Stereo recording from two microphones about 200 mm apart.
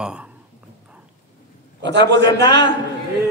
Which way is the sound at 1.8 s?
60° right (ahead or behind).